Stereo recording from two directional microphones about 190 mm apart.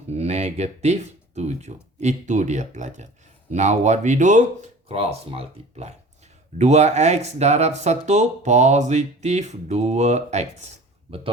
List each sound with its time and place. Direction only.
0.1 s speech: 35° right (ahead or behind)